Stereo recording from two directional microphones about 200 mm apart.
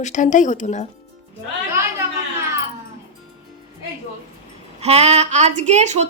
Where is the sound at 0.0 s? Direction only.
40° left (ahead or behind).